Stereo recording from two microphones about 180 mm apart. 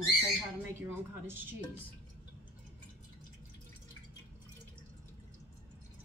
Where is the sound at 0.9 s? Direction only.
10° right (ahead or behind).